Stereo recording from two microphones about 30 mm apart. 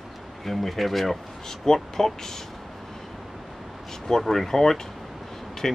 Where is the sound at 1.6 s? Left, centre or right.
Centre.